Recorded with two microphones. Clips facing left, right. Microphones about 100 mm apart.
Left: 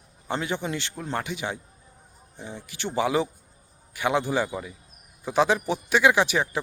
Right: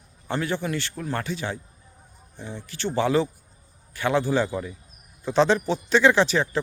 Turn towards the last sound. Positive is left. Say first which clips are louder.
# right 2 dB
turn(degrees=15)  # may be behind; listen again after turning